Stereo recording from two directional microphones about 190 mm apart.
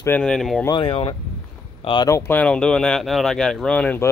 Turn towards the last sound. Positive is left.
turn(degrees=10)  # may be behind; listen again after turning